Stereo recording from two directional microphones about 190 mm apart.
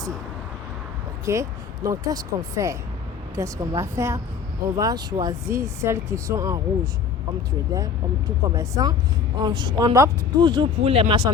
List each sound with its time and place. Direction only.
1.3 s speech: 15° right (ahead or behind)
7.7 s speech: 15° right (ahead or behind)